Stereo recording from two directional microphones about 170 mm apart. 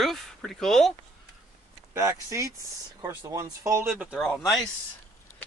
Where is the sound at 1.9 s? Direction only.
15° right (ahead or behind).